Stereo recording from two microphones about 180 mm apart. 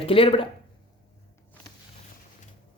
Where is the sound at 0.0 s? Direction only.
30° left (ahead or behind).